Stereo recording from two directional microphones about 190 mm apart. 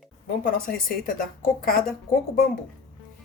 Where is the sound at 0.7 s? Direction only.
50° left (ahead or behind).